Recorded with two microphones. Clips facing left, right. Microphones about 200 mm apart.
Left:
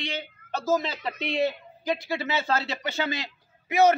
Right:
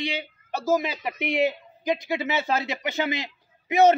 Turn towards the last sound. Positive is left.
turn(degrees=-20)  # may be behind; listen again after turning